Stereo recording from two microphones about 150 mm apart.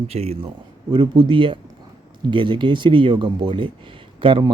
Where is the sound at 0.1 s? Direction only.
40° right (ahead or behind).